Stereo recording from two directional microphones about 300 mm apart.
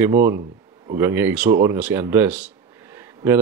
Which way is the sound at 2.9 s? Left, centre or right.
Centre.